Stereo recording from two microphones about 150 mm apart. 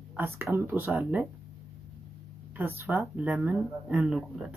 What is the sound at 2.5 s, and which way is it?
Speech, 15° right (ahead or behind).